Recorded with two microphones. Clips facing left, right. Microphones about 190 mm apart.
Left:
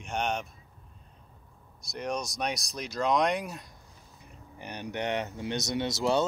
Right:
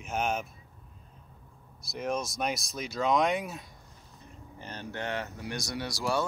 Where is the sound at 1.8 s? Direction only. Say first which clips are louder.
Right 1 dB; centre (ahead or behind).